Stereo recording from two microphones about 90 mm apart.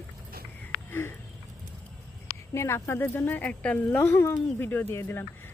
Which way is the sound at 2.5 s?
30° left (ahead or behind).